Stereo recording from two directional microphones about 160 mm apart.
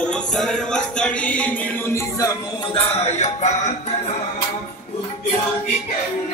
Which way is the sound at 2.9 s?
45° left (ahead or behind).